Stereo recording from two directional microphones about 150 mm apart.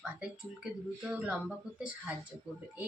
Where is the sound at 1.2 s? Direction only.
5° right (ahead or behind).